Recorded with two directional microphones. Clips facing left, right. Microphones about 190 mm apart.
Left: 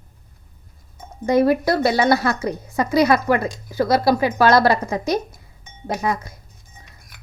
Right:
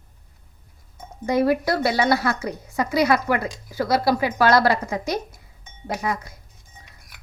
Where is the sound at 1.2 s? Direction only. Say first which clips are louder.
Left 3 dB; 45° left (ahead or behind).